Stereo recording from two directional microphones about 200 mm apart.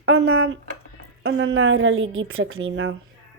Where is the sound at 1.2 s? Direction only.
80° right.